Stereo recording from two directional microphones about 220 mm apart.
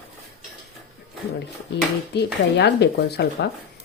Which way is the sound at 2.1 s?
50° left (ahead or behind).